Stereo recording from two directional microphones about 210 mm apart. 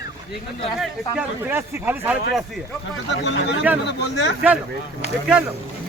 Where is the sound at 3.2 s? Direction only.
60° left (ahead or behind).